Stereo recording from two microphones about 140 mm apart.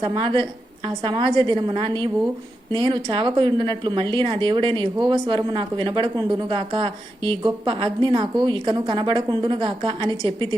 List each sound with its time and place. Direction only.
0.0 s speech: 40° right (ahead or behind)